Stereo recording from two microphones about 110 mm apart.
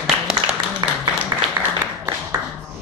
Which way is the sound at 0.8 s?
35° right (ahead or behind).